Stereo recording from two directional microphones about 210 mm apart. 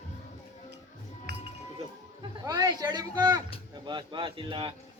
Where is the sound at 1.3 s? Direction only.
55° right (ahead or behind).